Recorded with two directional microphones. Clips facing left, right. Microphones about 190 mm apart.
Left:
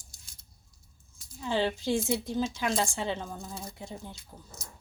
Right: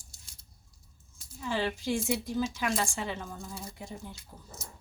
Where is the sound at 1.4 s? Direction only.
25° left (ahead or behind).